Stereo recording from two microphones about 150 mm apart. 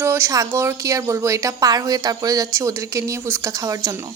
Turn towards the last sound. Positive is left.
turn(degrees=-20)  # may be behind; listen again after turning